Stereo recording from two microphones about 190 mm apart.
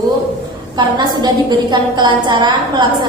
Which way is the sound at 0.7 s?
20° right (ahead or behind).